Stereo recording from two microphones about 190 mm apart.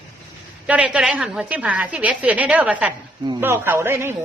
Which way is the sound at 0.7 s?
5° right (ahead or behind).